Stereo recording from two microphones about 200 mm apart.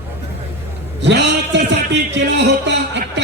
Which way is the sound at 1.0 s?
60° right (ahead or behind).